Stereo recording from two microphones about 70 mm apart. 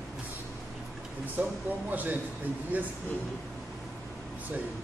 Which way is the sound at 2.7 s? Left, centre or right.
Right.